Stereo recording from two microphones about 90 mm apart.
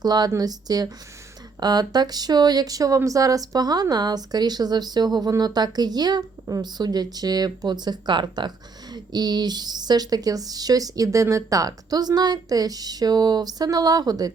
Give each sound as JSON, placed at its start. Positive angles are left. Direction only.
{"t": 0.0, "sound": "speech", "side_deg": -50}